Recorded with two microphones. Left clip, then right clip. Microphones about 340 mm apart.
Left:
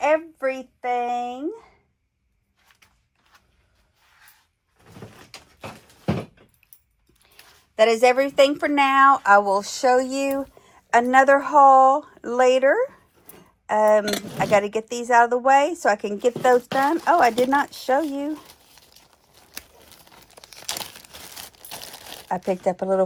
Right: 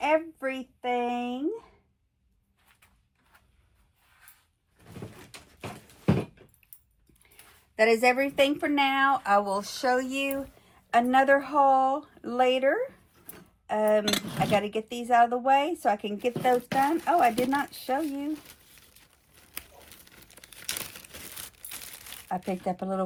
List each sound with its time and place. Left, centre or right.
0.0 s a sound: left
7.3 s speech: left
16.0 s speech: left
16.6 s speech: centre
22.3 s speech: centre